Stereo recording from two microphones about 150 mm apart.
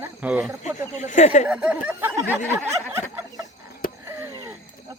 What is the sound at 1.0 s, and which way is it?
Speech, 55° left (ahead or behind).